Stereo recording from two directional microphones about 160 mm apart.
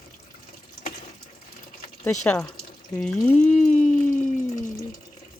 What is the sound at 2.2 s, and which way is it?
Speech, 5° left (ahead or behind).